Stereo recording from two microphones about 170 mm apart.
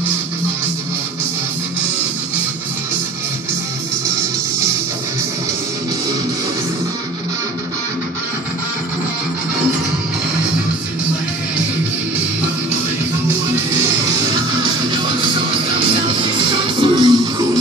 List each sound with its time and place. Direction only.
16.8 s music: 25° right (ahead or behind)